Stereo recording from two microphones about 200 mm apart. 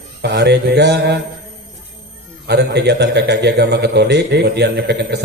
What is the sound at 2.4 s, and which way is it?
A man's voice, 55° right (ahead or behind).